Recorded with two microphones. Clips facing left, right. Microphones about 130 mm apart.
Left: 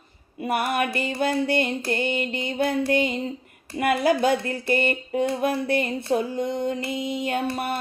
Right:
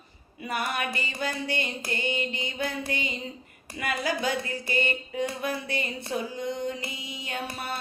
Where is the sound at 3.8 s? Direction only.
55° left (ahead or behind).